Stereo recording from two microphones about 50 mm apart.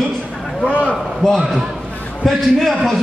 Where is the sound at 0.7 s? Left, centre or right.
Right.